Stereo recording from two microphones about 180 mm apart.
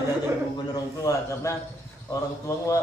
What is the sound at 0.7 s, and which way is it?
A man's voice, 20° left (ahead or behind).